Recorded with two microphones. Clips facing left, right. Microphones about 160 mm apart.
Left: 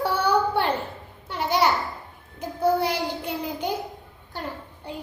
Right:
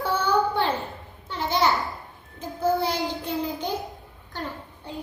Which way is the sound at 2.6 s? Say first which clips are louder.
Left 1 dB; 10° left (ahead or behind).